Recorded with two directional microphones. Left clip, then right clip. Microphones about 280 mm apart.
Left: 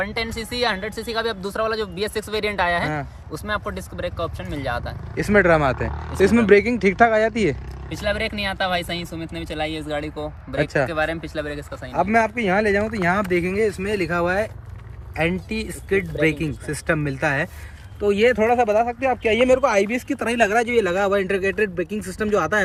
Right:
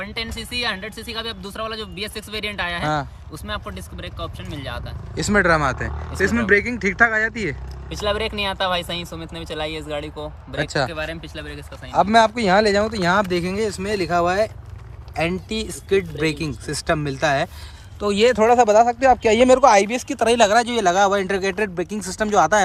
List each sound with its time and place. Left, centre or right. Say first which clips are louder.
0.0 s speech: left 3 dB; centre
7.9 s speech: right 1 dB; centre
11.9 s speech: right 4 dB; centre